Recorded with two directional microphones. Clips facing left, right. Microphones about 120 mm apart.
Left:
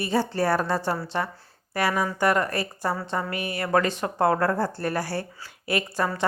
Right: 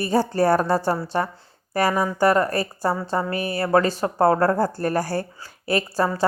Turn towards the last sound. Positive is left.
turn(degrees=-35)  # may be behind; listen again after turning